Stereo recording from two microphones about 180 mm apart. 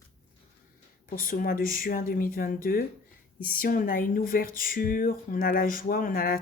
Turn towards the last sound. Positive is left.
turn(degrees=50)  # may be behind; listen again after turning